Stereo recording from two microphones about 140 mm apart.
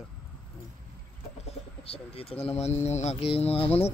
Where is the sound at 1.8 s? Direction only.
45° left (ahead or behind).